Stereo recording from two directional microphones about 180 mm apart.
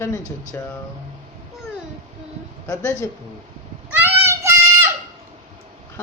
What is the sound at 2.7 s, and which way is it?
Speech, 15° left (ahead or behind).